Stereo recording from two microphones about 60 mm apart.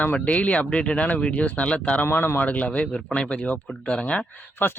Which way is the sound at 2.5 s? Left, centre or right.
Left.